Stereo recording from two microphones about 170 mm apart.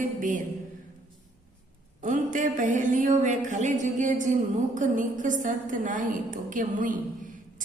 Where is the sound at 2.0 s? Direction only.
50° right (ahead or behind).